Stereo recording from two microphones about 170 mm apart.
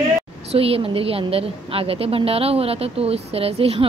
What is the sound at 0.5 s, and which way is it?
Speech, 35° right (ahead or behind).